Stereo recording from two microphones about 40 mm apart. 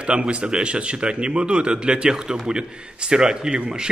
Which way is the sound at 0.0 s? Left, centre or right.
Right.